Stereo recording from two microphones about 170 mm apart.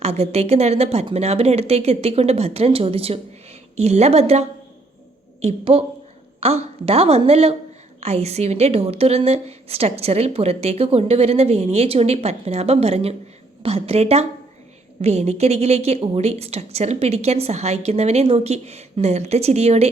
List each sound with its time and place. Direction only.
0.0 s a woman's voice: 40° right (ahead or behind)
5.7 s a woman's voice: 35° right (ahead or behind)